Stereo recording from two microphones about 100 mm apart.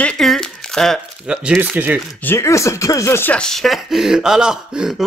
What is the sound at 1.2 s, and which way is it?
Speech, 10° right (ahead or behind).